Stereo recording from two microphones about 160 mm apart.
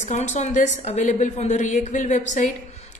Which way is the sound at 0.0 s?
50° left (ahead or behind).